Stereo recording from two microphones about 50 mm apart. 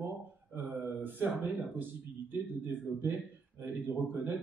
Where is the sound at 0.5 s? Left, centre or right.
Right.